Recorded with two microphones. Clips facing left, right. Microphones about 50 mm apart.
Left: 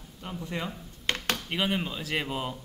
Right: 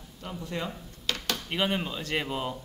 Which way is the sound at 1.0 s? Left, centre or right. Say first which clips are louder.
Left 2 dB; left.